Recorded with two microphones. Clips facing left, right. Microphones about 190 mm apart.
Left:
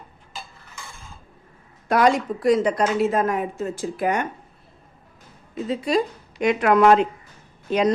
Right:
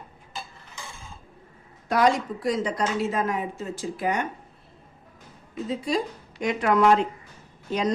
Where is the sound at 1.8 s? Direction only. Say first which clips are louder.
Left 3 dB; 60° left (ahead or behind).